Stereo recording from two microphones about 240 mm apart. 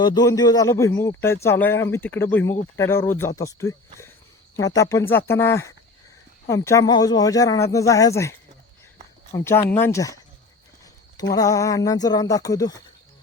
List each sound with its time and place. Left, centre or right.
0.0 s speech: centre
11.2 s speech: centre